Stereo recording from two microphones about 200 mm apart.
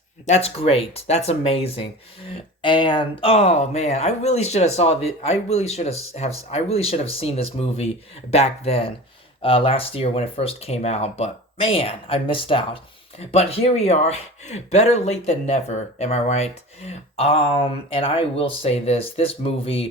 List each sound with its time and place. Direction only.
0.3 s speech: 30° left (ahead or behind)